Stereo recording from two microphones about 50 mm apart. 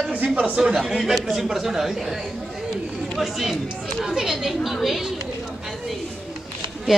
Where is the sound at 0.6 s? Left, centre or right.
Centre.